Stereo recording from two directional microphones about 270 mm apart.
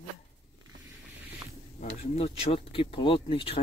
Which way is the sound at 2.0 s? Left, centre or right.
Left.